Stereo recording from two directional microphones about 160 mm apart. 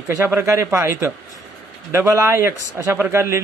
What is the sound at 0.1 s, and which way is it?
A man's voice, 15° right (ahead or behind).